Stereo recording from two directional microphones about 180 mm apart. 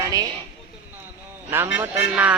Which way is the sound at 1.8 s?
10° right (ahead or behind).